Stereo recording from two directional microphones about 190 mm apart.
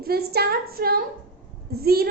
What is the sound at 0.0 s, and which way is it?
A woman's voice, 55° right (ahead or behind).